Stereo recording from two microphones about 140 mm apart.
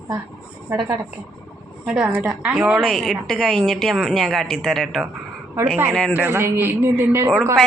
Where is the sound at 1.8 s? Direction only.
5° right (ahead or behind).